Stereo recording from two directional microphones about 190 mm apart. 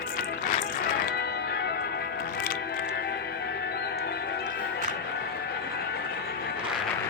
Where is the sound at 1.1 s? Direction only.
60° left (ahead or behind).